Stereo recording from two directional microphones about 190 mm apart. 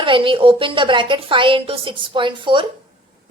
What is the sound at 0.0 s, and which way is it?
A woman's voice, 25° right (ahead or behind).